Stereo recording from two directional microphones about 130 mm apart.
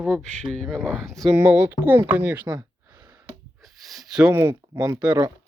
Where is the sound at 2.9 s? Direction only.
15° right (ahead or behind).